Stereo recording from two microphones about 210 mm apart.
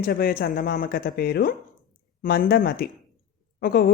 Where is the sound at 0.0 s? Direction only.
45° left (ahead or behind).